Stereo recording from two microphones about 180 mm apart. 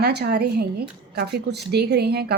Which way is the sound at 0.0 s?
65° right (ahead or behind).